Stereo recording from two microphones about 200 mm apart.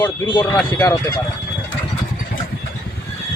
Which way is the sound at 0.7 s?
15° left (ahead or behind).